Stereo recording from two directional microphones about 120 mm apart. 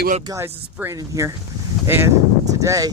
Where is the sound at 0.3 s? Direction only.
20° right (ahead or behind).